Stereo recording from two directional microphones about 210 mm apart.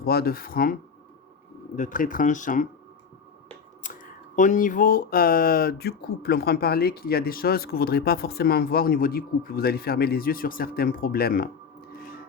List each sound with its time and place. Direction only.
0.0 s speech: 45° left (ahead or behind)
3.9 s a sound: 40° left (ahead or behind)
4.4 s speech: 35° left (ahead or behind)